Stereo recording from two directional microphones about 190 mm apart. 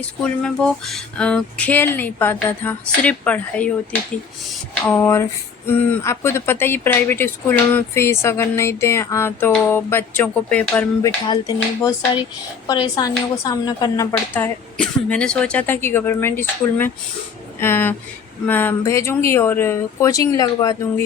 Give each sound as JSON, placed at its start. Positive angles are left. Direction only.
{"t": 0.0, "sound": "speech", "side_deg": 5}
{"t": 4.9, "sound": "speech", "side_deg": 15}
{"t": 11.3, "sound": "speech", "side_deg": 20}